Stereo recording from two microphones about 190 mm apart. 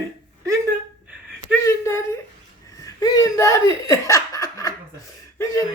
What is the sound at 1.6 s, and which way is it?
Speech, 15° left (ahead or behind).